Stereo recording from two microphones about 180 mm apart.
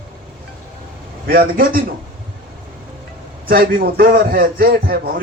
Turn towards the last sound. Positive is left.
turn(degrees=-55)  # may be behind; listen again after turning